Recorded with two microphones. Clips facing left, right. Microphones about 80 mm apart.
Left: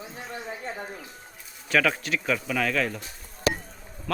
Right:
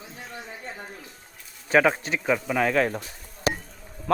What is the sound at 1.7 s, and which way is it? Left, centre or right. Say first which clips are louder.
Speech: right 3 dB; right.